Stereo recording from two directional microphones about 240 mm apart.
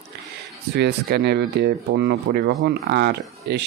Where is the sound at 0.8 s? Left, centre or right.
Right.